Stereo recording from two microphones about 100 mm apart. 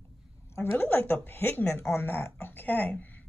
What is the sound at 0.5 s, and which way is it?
A woman's voice, 25° left (ahead or behind).